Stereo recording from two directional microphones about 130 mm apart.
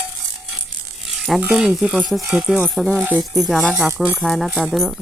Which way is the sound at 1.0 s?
Centre (ahead or behind).